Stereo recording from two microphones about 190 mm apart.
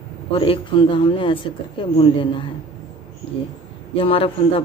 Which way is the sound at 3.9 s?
30° left (ahead or behind).